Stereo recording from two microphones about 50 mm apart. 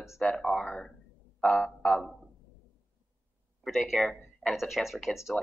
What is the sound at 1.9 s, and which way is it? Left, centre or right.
Speech, centre.